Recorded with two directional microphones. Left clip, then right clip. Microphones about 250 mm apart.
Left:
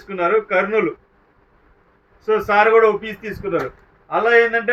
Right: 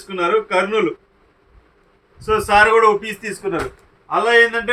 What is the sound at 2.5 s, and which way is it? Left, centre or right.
Speech, right.